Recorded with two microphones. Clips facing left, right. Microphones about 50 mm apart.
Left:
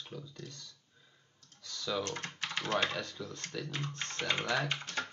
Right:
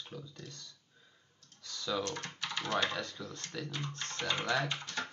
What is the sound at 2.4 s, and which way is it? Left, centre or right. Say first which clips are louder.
Speech: left 1 dB; left.